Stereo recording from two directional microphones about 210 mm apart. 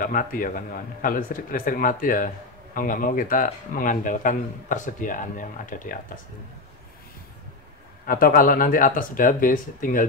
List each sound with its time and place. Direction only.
0.0 s a man's voice: 40° left (ahead or behind)
8.1 s a man's voice: 40° left (ahead or behind)